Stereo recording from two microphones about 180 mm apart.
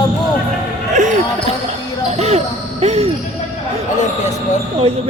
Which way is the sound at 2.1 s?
35° right (ahead or behind).